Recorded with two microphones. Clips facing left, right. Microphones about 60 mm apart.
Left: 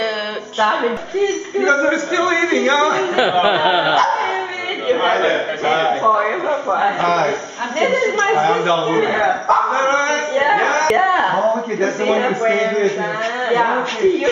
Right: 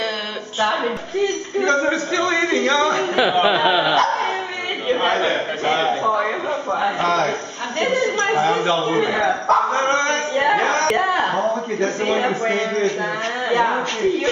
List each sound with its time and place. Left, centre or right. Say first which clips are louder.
0.6 s a man's voice: left 4 dB; centre